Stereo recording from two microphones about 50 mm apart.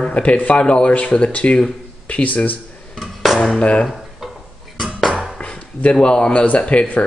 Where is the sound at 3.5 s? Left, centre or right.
Left.